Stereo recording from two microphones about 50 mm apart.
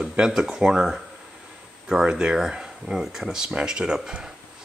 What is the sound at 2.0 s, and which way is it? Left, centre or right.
Speech, centre.